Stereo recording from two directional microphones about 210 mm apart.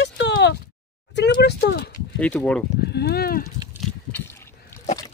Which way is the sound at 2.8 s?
50° left (ahead or behind).